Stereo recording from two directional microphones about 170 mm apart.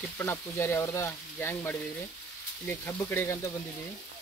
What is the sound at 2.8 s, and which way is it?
Speech, 15° left (ahead or behind).